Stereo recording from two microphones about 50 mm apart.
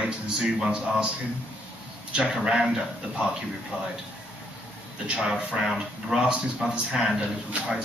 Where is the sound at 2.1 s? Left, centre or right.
Centre.